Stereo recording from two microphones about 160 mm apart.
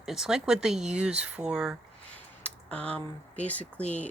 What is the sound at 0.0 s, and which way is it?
Speech, 5° right (ahead or behind).